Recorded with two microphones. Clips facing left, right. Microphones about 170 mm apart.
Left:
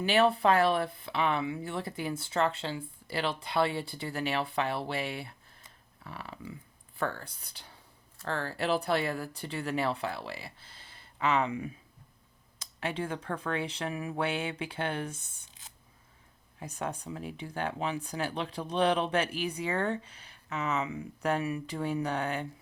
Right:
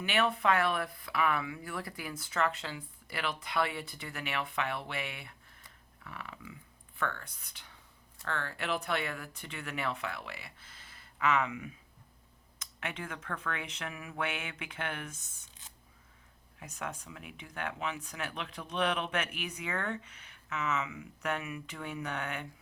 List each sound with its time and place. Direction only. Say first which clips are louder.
0.0 s speech: left 5 dB; 30° left (ahead or behind)
16.6 s speech: left 5 dB; 30° left (ahead or behind)